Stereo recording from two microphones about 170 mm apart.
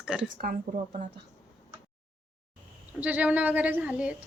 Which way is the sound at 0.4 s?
50° right (ahead or behind).